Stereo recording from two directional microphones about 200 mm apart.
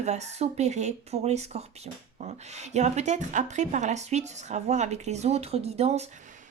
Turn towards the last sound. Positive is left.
turn(degrees=-30)  # may be behind; listen again after turning